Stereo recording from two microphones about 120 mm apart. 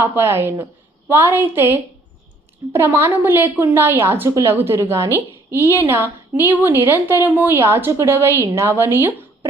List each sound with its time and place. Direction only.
0.0 s a woman's voice: 20° right (ahead or behind)